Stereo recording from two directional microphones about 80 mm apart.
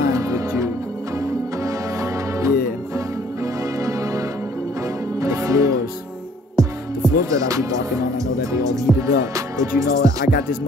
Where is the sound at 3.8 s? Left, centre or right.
Right.